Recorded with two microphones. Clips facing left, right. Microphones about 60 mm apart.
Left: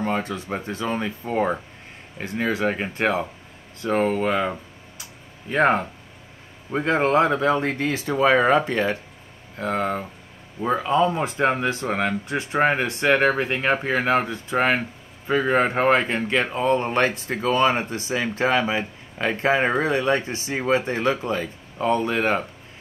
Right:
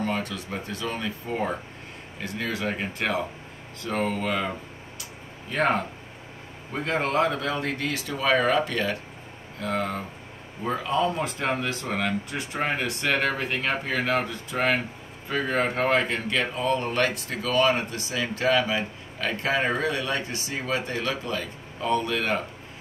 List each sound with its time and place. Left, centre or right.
0.0 s speech: left